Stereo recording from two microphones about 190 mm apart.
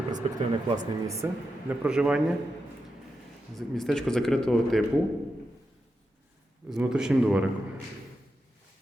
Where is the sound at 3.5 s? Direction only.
Centre (ahead or behind).